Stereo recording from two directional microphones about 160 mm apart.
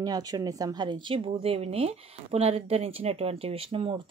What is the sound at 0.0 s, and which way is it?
A woman's voice, 25° right (ahead or behind).